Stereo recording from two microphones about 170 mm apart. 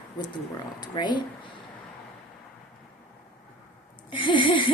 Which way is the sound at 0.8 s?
25° left (ahead or behind).